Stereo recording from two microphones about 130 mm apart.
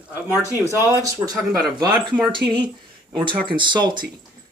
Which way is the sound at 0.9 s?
25° right (ahead or behind).